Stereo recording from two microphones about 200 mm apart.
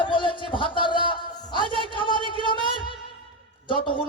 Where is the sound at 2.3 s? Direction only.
25° left (ahead or behind).